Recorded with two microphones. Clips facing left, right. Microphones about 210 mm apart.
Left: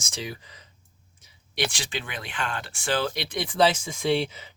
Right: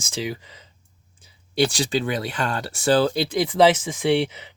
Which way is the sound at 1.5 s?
35° right (ahead or behind).